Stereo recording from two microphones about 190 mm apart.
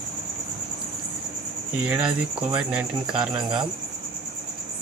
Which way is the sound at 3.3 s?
25° right (ahead or behind).